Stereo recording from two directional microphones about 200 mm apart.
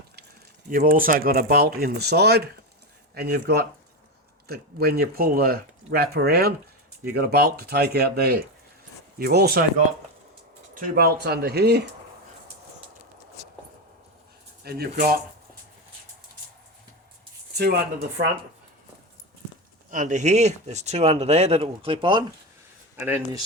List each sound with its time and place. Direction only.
0.7 s speech: 45° right (ahead or behind)
14.6 s speech: 50° right (ahead or behind)
19.9 s speech: 40° right (ahead or behind)
23.0 s speech: 10° right (ahead or behind)